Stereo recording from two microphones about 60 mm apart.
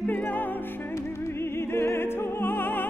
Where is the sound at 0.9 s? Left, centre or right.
Left.